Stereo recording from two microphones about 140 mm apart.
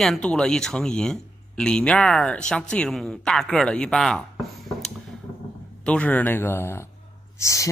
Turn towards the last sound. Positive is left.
turn(degrees=20)  # may be behind; listen again after turning